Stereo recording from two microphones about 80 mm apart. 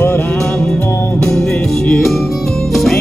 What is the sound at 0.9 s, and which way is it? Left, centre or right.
Music, left.